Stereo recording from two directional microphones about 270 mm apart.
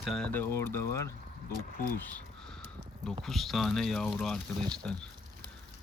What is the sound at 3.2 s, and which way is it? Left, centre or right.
Speech, centre.